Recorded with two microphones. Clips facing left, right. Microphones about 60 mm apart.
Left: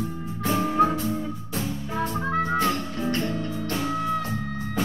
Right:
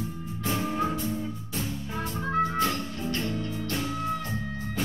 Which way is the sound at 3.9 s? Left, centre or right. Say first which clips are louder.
Left 4 dB; left.